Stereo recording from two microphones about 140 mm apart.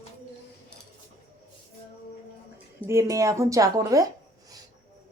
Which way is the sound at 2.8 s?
20° right (ahead or behind).